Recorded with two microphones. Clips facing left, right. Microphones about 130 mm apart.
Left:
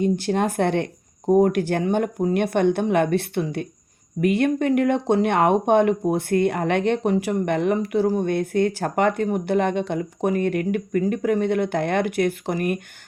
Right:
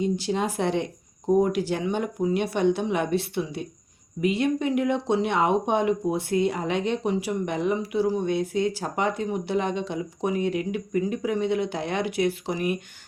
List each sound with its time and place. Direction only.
0.0 s speech: 55° left (ahead or behind)